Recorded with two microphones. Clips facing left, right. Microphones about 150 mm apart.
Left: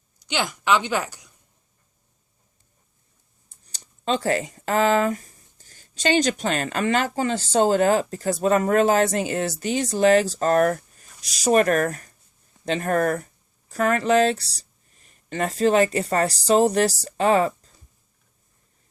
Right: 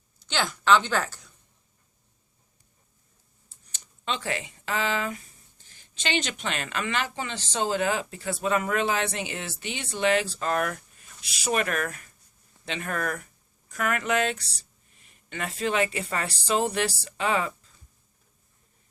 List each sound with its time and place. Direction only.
0.3 s a woman's voice: 15° left (ahead or behind)
3.6 s speech: 35° left (ahead or behind)